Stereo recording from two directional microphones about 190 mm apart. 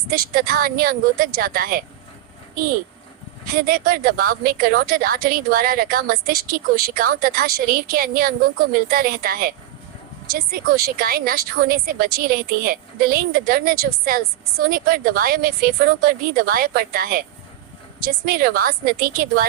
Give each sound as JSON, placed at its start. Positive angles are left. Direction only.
{"t": 0.1, "sound": "speech", "side_deg": -50}
{"t": 3.4, "sound": "speech", "side_deg": -50}